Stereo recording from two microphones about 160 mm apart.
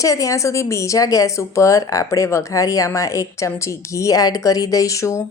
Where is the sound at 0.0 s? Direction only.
20° left (ahead or behind).